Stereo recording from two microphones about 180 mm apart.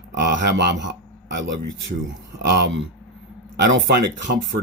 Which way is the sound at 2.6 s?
90° right.